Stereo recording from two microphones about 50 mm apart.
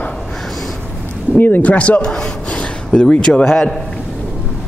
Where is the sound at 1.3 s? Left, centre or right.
Left.